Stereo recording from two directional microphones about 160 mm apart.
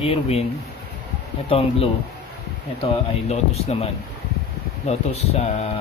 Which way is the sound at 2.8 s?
40° left (ahead or behind).